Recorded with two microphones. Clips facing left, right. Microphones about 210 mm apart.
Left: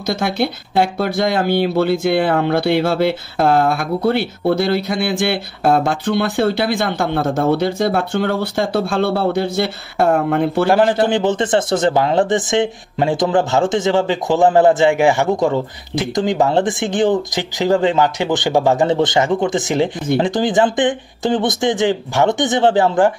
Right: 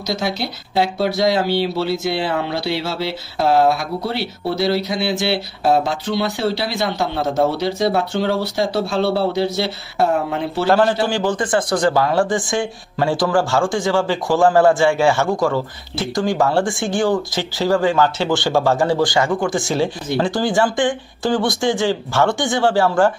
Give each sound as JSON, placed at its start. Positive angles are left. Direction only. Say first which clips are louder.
{"t": 0.0, "sound": "speech", "louder": "left 4 dB", "side_deg": 55}
{"t": 10.7, "sound": "a man's voice", "louder": "even", "side_deg": 15}